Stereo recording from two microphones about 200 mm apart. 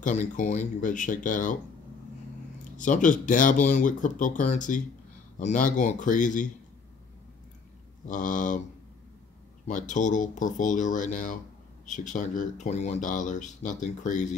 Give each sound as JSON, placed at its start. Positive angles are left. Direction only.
{"t": 0.0, "sound": "speech", "side_deg": 40}
{"t": 2.8, "sound": "speech", "side_deg": 40}
{"t": 8.1, "sound": "speech", "side_deg": 40}
{"t": 9.7, "sound": "speech", "side_deg": 40}